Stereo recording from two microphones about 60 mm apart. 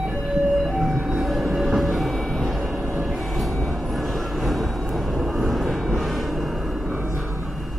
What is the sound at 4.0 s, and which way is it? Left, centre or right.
Vehicle, centre.